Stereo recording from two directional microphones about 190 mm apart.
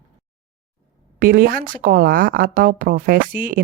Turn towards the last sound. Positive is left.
turn(degrees=-45)  # may be behind; listen again after turning